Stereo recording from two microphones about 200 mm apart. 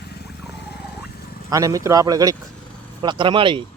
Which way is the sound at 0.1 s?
55° left (ahead or behind).